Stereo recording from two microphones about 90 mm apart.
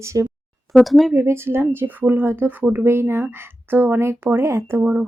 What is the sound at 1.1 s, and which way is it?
Speech, 30° right (ahead or behind).